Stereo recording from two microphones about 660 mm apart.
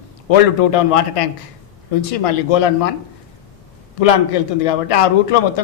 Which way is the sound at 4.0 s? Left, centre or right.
Left.